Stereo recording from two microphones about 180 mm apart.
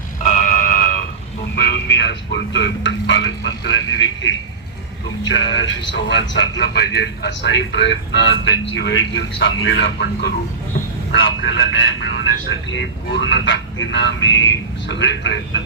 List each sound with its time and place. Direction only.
0.3 s a sound: 45° left (ahead or behind)
1.5 s a man's voice: 60° left (ahead or behind); by 6.5 s 85° left
6.6 s a man's voice: 70° left (ahead or behind); by 15.6 s 90° left